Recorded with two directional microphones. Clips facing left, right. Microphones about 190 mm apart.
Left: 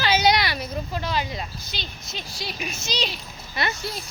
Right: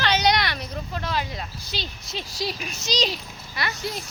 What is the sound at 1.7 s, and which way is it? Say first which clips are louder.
Speech: right 3 dB; 35° right (ahead or behind).